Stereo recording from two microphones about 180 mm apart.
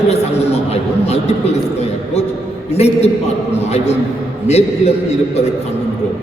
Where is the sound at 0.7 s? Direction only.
35° left (ahead or behind).